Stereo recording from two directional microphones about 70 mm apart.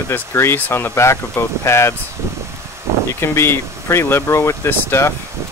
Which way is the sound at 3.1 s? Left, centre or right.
Left.